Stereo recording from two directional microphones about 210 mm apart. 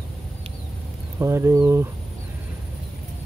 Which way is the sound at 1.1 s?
10° right (ahead or behind).